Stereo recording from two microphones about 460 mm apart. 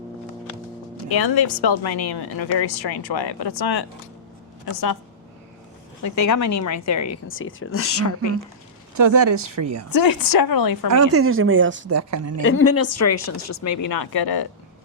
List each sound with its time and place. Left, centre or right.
1.2 s a woman's voice: left
6.0 s speech: left
9.0 s speech: right
9.9 s a woman's voice: left
10.8 s a woman's voice: right
12.4 s speech: left